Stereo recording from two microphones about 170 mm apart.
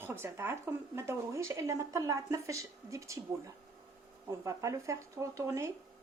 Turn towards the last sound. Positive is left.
turn(degrees=-15)  # may be behind; listen again after turning